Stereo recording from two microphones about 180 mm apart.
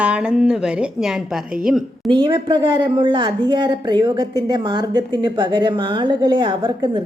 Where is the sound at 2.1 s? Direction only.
25° right (ahead or behind).